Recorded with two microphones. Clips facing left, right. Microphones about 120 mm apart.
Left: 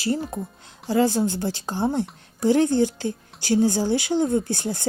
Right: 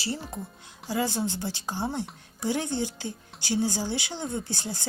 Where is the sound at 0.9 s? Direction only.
45° left (ahead or behind).